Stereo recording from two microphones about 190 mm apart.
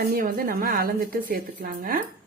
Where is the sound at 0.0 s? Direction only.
50° right (ahead or behind).